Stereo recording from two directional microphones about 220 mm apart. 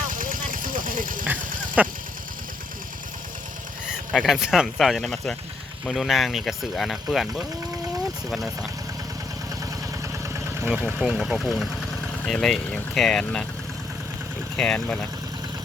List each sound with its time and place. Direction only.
0.1 s vehicle: 35° right (ahead or behind)
1.8 s speech: 5° right (ahead or behind)
4.1 s speech: centre (ahead or behind)
10.0 s speech: 15° right (ahead or behind); by 13.4 s 5° left (ahead or behind)
14.5 s speech: 5° left (ahead or behind)